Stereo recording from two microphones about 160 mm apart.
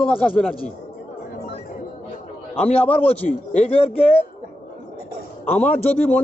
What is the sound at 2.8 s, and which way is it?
Speech, 10° left (ahead or behind).